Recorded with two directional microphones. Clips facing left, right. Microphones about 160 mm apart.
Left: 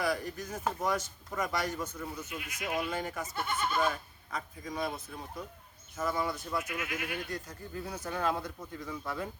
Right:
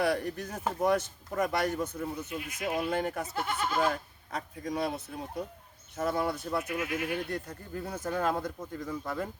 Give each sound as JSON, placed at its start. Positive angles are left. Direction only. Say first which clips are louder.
{"t": 0.0, "sound": "speech", "louder": "right 4 dB", "side_deg": -65}
{"t": 2.0, "sound": "speech", "louder": "right 5 dB", "side_deg": -30}
{"t": 2.9, "sound": "speech", "louder": "right 5 dB", "side_deg": -55}
{"t": 6.6, "sound": "speech", "louder": "right 4 dB", "side_deg": -35}
{"t": 7.3, "sound": "speech", "louder": "right 3 dB", "side_deg": -60}